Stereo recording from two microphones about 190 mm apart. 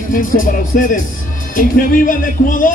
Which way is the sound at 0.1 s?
45° left (ahead or behind).